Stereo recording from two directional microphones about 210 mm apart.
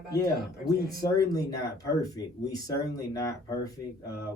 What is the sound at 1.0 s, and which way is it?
Speech, 15° left (ahead or behind).